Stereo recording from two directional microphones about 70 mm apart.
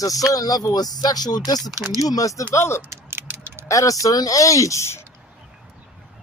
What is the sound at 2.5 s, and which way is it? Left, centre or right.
Speech, left.